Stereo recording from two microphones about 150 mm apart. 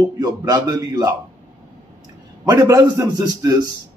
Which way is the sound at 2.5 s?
20° right (ahead or behind).